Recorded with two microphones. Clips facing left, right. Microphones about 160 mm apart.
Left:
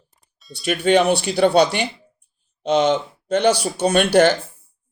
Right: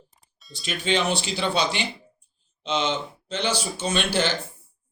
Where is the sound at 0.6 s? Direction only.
60° left (ahead or behind).